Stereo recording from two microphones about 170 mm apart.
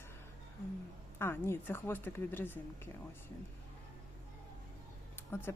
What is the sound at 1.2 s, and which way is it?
A woman's voice, 10° left (ahead or behind).